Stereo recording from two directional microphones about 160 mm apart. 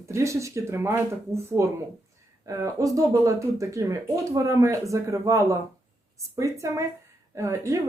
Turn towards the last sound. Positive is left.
turn(degrees=-20)  # may be behind; listen again after turning